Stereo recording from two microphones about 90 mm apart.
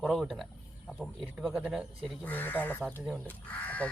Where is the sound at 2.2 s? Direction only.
20° left (ahead or behind).